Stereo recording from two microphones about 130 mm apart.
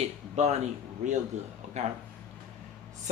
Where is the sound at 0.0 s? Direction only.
60° right (ahead or behind).